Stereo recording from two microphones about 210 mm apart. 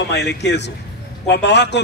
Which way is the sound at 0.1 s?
55° left (ahead or behind).